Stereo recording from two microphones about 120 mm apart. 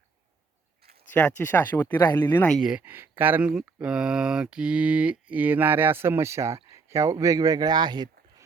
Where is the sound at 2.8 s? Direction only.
15° right (ahead or behind).